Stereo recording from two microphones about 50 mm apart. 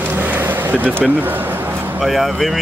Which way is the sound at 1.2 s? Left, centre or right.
Right.